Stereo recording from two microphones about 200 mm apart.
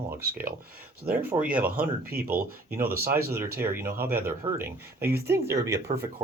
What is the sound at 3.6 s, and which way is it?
Speech, 10° right (ahead or behind).